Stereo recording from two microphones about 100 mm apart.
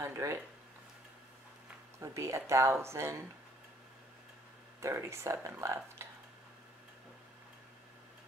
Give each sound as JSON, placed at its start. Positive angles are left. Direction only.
{"t": 0.0, "sound": "speech", "side_deg": -25}
{"t": 2.0, "sound": "speech", "side_deg": -30}
{"t": 4.7, "sound": "speech", "side_deg": -30}
{"t": 6.0, "sound": "a sound", "side_deg": -25}